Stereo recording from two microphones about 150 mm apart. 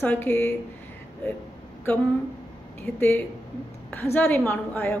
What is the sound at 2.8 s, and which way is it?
A woman's voice, 10° left (ahead or behind).